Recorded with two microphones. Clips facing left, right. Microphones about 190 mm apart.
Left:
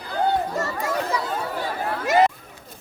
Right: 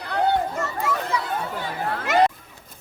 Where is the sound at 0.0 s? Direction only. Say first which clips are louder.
Right 1 dB; 70° right (ahead or behind).